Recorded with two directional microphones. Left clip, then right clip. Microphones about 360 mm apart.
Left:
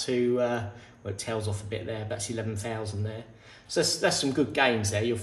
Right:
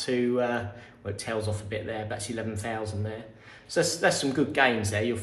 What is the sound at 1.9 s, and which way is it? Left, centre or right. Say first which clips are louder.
Speech: right 1 dB; centre.